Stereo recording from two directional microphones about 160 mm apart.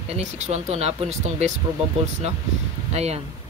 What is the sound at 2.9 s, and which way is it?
Speech, 40° right (ahead or behind).